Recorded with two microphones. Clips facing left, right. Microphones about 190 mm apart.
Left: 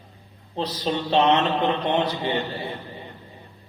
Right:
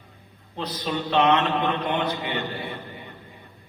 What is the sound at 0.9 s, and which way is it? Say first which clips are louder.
Speech: left 1 dB; 30° left (ahead or behind).